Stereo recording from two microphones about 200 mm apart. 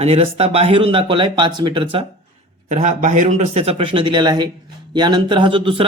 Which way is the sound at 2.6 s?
35° right (ahead or behind).